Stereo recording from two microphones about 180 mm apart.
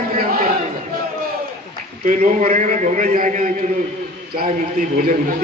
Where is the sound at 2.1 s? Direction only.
40° right (ahead or behind).